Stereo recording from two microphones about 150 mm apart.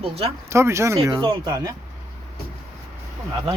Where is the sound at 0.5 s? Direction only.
20° right (ahead or behind).